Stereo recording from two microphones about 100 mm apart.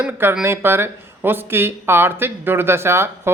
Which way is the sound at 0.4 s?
25° right (ahead or behind).